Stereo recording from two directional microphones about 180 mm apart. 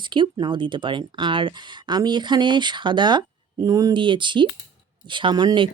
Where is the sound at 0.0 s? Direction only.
25° right (ahead or behind).